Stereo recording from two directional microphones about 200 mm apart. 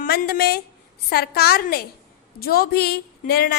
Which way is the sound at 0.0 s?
45° left (ahead or behind).